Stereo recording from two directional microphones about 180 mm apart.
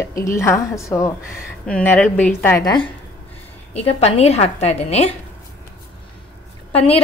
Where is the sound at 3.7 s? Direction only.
35° left (ahead or behind).